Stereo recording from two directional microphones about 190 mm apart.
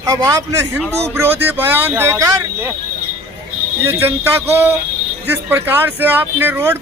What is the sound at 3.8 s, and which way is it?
Speech, 10° right (ahead or behind).